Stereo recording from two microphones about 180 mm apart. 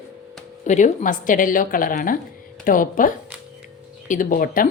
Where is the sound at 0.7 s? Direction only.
45° left (ahead or behind).